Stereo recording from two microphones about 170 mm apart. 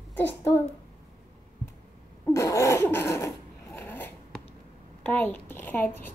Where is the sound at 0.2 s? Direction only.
15° left (ahead or behind).